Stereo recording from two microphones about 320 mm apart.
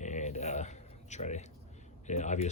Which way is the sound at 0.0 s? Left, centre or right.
Left.